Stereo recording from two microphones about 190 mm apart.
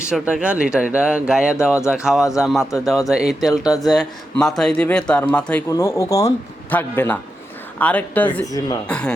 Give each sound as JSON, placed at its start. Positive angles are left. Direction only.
{"t": 0.0, "sound": "a man's voice", "side_deg": -5}
{"t": 8.5, "sound": "a man's voice", "side_deg": 20}
{"t": 8.9, "sound": "speech", "side_deg": 5}